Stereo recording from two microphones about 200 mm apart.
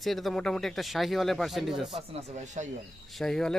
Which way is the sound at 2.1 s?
35° right (ahead or behind).